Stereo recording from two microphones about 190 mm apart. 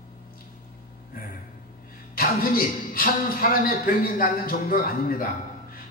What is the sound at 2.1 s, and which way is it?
A woman's voice, 50° left (ahead or behind).